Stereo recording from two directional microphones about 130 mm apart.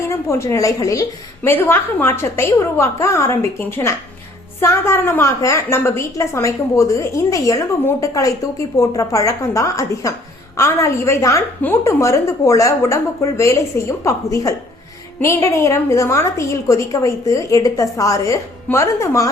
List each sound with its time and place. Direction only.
0.1 s a woman's voice: 20° left (ahead or behind)